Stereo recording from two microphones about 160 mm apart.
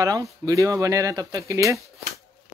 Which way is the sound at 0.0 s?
20° right (ahead or behind).